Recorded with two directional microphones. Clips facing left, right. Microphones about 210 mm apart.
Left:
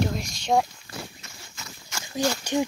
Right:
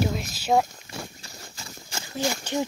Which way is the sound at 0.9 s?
30° right (ahead or behind).